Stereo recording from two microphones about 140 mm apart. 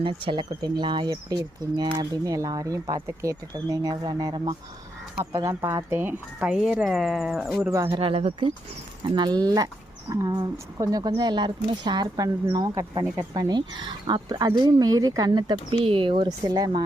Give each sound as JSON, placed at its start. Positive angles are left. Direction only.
{"t": 0.0, "sound": "speech", "side_deg": -35}
{"t": 7.6, "sound": "speech", "side_deg": -20}
{"t": 7.9, "sound": "speech", "side_deg": -40}
{"t": 9.1, "sound": "speech", "side_deg": -30}